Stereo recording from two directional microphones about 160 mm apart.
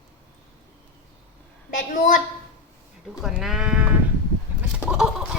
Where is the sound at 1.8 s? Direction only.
55° left (ahead or behind).